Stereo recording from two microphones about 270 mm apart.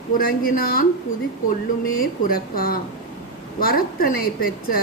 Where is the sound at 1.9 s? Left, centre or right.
Left.